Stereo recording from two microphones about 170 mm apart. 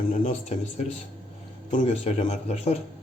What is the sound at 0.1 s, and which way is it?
Speech, 40° left (ahead or behind).